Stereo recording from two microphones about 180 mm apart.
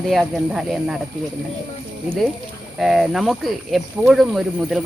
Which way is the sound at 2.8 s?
Centre (ahead or behind).